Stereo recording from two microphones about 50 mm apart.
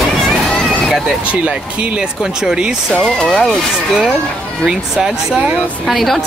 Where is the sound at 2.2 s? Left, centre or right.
Centre.